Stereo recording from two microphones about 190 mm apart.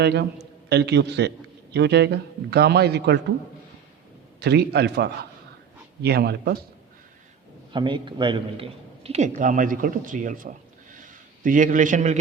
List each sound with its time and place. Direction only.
0.0 s a man's voice: 60° right (ahead or behind)
4.4 s a man's voice: 60° right (ahead or behind)
7.7 s a man's voice: 25° right (ahead or behind)